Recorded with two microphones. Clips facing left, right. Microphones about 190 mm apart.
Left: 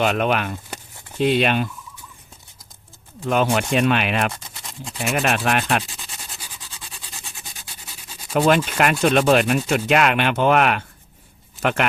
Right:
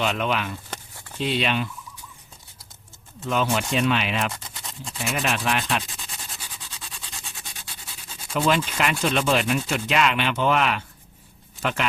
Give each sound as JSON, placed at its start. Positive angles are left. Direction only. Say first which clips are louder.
{"t": 0.0, "sound": "sanding", "louder": "left 5 dB", "side_deg": 55}
{"t": 0.7, "sound": "a sound", "louder": "left 1 dB", "side_deg": 15}
{"t": 1.2, "sound": "fowl", "louder": "left 6 dB", "side_deg": 55}
{"t": 3.2, "sound": "sanding", "louder": "left 4 dB", "side_deg": 55}
{"t": 8.3, "sound": "sanding", "louder": "left 5 dB", "side_deg": 55}